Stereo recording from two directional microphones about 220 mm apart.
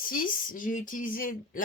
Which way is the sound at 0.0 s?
40° left (ahead or behind).